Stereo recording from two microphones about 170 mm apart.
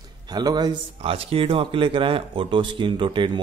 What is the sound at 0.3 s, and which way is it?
Speech, 25° right (ahead or behind).